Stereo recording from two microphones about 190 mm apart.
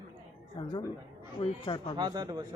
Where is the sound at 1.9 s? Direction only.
20° right (ahead or behind).